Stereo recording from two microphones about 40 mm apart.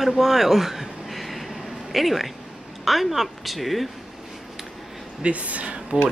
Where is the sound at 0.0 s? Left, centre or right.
Centre.